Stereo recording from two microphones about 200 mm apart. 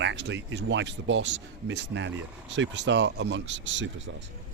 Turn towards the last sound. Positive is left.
turn(degrees=-65)  # may be behind; listen again after turning